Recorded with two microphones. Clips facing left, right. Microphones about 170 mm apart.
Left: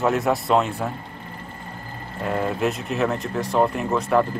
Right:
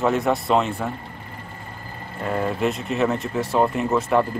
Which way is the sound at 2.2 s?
Centre (ahead or behind).